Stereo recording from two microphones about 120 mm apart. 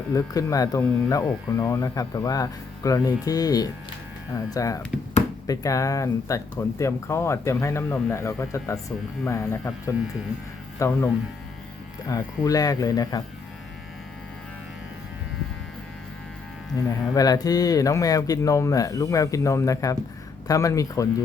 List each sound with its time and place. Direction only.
0.1 s speech: 30° left (ahead or behind)
16.7 s speech: 35° left (ahead or behind)